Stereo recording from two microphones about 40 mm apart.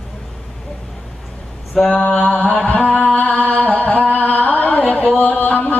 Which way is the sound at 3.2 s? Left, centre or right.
Left.